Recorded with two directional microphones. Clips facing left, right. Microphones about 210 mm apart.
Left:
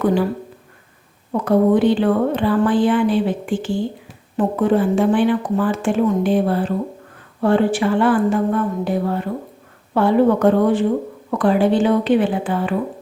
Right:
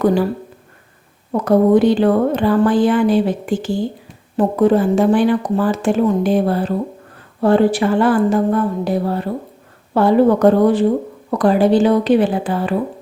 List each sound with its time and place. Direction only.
0.0 s speech: 40° right (ahead or behind)
1.3 s speech: 40° right (ahead or behind)